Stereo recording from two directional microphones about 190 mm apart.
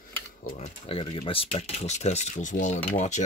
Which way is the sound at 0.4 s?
40° left (ahead or behind).